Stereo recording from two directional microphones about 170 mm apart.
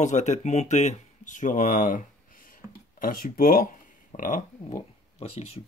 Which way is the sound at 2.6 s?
15° right (ahead or behind).